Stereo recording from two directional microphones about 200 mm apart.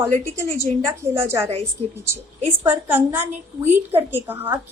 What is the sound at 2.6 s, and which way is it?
A woman's voice, 10° right (ahead or behind).